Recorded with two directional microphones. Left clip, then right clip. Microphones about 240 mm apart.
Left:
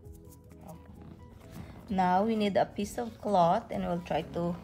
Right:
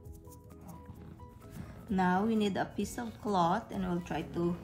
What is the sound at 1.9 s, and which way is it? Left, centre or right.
Speech, left.